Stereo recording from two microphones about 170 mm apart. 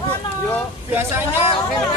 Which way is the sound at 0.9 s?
10° right (ahead or behind).